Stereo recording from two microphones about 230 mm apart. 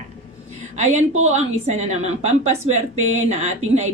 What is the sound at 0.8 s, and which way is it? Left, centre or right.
Speech, right.